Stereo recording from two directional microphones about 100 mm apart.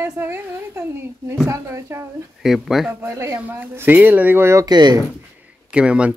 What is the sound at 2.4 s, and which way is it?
Speech, centre (ahead or behind).